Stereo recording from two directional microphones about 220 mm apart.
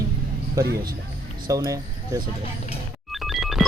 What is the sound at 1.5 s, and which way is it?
Speech, 15° right (ahead or behind).